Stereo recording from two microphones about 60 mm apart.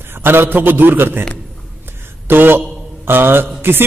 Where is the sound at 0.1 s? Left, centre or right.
Right.